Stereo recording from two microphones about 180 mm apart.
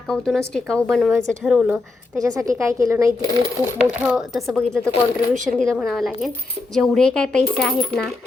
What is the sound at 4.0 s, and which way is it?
A woman's voice, 5° right (ahead or behind).